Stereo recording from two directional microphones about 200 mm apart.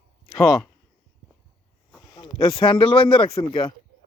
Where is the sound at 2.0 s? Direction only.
20° left (ahead or behind).